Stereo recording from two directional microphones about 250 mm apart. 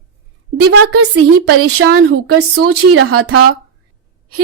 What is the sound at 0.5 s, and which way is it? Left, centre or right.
A woman's voice, right.